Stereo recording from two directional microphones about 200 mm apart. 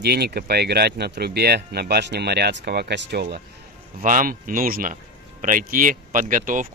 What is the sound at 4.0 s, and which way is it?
Speech, 40° right (ahead or behind).